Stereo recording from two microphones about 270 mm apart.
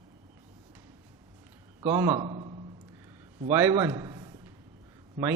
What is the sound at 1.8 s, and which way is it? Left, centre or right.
A man's voice, centre.